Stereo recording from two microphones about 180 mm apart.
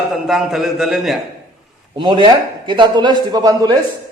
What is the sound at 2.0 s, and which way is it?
Speech, 25° right (ahead or behind).